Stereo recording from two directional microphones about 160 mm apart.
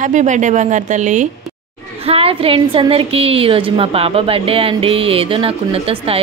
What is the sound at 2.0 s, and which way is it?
A woman's voice, 35° right (ahead or behind).